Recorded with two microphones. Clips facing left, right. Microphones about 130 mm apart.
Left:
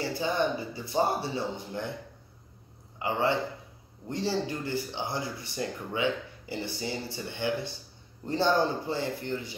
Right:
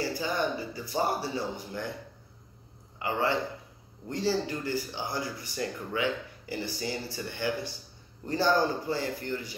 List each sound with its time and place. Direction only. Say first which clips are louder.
0.0 s speech: left 2 dB; 25° left (ahead or behind)
3.0 s a man's voice: left 1 dB; 20° left (ahead or behind)